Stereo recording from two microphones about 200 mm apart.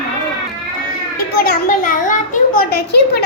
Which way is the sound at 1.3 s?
45° left (ahead or behind).